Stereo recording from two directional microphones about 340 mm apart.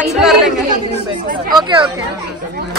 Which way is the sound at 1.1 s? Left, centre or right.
Right.